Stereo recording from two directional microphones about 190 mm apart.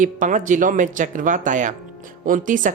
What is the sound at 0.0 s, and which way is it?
Speech, 40° right (ahead or behind).